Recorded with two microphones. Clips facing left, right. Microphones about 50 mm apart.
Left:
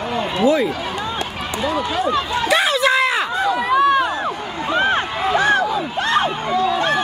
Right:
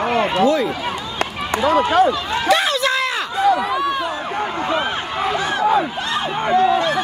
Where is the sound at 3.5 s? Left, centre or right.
Left.